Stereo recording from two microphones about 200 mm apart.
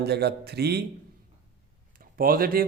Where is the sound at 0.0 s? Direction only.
55° right (ahead or behind).